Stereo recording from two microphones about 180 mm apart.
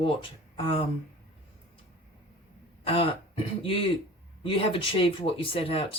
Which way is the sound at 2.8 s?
30° left (ahead or behind).